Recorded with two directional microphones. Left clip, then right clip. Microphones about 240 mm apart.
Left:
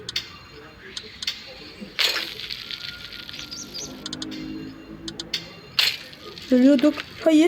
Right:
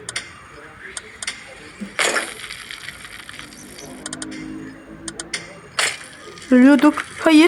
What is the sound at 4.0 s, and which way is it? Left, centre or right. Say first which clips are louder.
Music: right 5 dB; centre.